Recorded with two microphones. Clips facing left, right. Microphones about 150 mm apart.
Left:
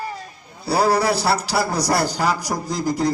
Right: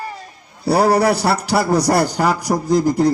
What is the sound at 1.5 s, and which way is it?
Speech, 55° right (ahead or behind).